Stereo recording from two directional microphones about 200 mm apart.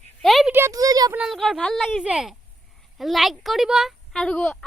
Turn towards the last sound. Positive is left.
turn(degrees=5)  # may be behind; listen again after turning